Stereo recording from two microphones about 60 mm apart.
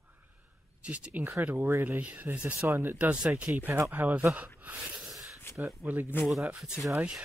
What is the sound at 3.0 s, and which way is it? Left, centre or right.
Speech, right.